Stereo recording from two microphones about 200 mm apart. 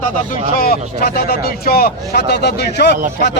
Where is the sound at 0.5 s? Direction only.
50° left (ahead or behind).